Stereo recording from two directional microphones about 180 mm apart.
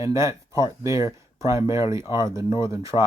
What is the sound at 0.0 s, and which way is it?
Speech, 15° right (ahead or behind).